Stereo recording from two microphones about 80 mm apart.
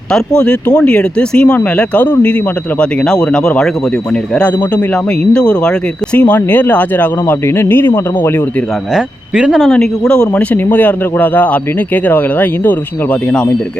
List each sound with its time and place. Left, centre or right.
0.1 s speech: centre
9.0 s speech: centre
9.7 s speech: centre